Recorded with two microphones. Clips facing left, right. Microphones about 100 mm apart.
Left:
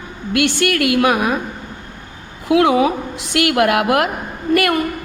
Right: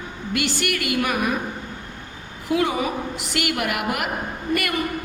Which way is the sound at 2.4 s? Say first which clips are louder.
Left 9 dB; 80° left.